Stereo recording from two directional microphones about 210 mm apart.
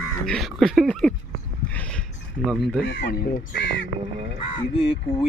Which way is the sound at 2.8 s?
50° left (ahead or behind).